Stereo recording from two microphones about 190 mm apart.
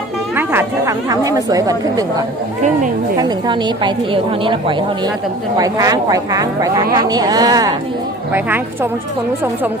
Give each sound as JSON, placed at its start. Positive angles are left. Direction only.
{"t": 0.3, "sound": "speech", "side_deg": -15}
{"t": 2.6, "sound": "a woman's voice", "side_deg": -40}
{"t": 3.2, "sound": "a woman's voice", "side_deg": -20}